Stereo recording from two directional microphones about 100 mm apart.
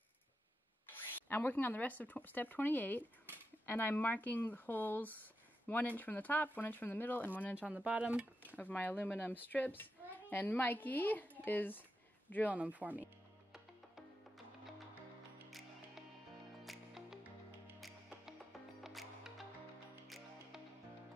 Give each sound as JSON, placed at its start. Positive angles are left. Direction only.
{"t": 1.3, "sound": "speech", "side_deg": 20}
{"t": 7.7, "sound": "speech", "side_deg": -15}
{"t": 8.5, "sound": "speech", "side_deg": 15}
{"t": 12.5, "sound": "speech", "side_deg": -15}
{"t": 16.6, "sound": "music", "side_deg": 0}